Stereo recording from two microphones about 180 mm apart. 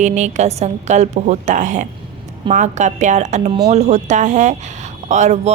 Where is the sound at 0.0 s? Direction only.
40° right (ahead or behind).